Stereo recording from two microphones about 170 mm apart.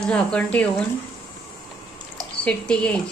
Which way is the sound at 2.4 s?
5° left (ahead or behind).